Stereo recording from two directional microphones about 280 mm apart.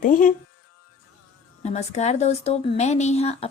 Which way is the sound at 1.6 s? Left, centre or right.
Left.